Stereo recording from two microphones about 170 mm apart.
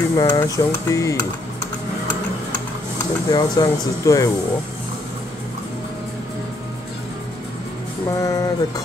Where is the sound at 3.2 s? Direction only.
20° left (ahead or behind).